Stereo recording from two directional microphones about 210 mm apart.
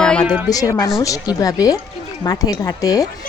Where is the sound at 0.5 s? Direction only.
15° left (ahead or behind).